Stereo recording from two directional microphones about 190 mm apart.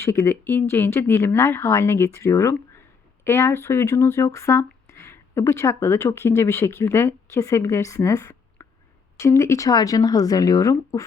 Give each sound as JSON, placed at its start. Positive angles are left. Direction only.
{"t": 0.0, "sound": "speech", "side_deg": 15}